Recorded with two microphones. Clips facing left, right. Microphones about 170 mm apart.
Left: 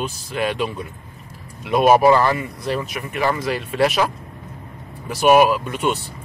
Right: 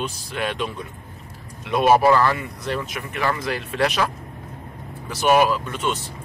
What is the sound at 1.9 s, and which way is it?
Speech, 15° left (ahead or behind).